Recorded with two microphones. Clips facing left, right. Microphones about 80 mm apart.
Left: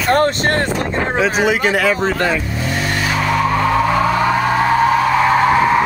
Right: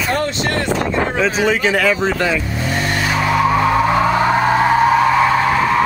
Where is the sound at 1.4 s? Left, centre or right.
Centre.